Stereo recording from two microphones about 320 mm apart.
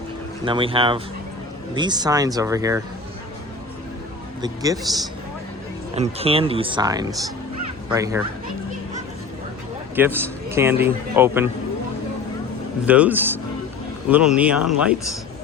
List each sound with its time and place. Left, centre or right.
0.4 s a man's voice: centre
4.4 s speech: centre
5.9 s a man's voice: centre
9.9 s a man's voice: centre
12.8 s speech: centre